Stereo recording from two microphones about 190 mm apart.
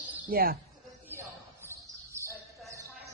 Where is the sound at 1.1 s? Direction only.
10° right (ahead or behind).